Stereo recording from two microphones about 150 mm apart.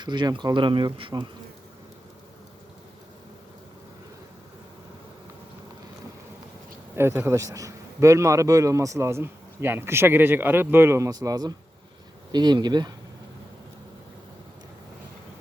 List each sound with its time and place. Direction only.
0.0 s speech: 30° right (ahead or behind)
6.9 s a man's voice: 15° right (ahead or behind)